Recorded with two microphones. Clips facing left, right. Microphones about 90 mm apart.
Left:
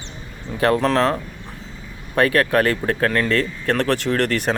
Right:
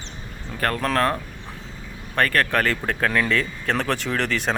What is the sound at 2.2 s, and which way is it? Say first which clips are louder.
A man's voice: left 4 dB; 10° left (ahead or behind).